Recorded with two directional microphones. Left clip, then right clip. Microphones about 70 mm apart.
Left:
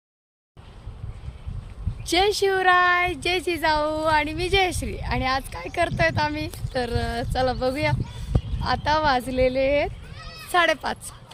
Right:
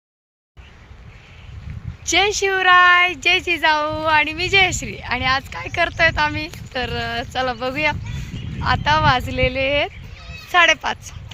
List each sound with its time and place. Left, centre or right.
2.0 s speech: left
9.6 s speech: left
10.2 s sheep: left
10.8 s speech: left